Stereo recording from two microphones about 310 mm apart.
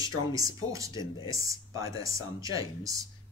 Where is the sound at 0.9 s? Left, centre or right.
Centre.